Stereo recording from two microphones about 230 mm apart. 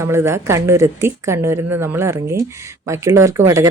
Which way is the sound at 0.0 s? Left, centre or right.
Centre.